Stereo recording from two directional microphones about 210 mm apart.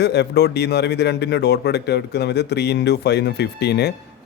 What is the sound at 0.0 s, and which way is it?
A man's voice, 50° left (ahead or behind).